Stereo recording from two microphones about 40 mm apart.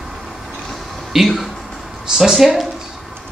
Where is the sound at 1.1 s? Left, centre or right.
Centre.